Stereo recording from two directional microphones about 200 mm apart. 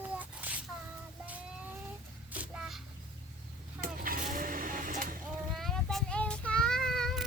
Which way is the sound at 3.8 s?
45° right (ahead or behind).